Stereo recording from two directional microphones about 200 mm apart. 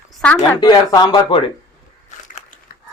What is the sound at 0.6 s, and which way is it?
Speech, 20° left (ahead or behind).